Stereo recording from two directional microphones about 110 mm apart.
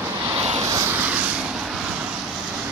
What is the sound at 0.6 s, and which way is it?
Vehicle, 30° right (ahead or behind).